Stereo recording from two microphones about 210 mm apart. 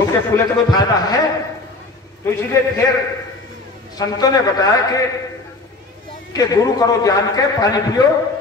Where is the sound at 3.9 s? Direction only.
20° left (ahead or behind).